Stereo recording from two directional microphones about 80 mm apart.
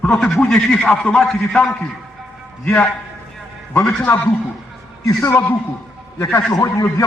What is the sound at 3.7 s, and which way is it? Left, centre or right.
Speech, left.